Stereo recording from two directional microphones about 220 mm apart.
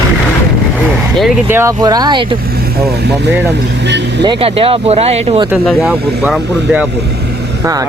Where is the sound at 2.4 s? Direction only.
45° right (ahead or behind).